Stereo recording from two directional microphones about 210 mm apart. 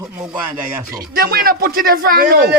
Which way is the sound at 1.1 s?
45° right (ahead or behind).